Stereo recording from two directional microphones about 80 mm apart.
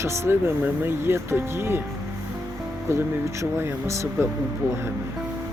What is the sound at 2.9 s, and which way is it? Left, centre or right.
Speech, right.